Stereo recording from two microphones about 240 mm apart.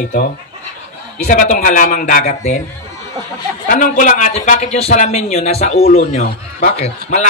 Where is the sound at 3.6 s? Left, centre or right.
Left.